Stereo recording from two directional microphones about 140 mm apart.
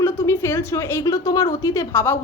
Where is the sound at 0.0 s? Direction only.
20° left (ahead or behind).